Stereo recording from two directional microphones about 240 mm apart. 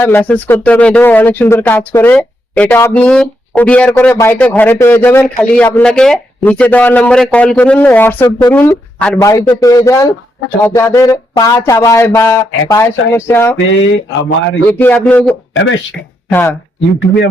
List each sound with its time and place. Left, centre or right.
0.0 s speech: centre
13.7 s speech: left
14.7 s speech: centre
15.5 s speech: left
16.3 s speech: centre